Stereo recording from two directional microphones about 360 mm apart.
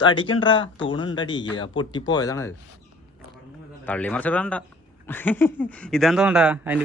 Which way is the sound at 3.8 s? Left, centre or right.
Centre.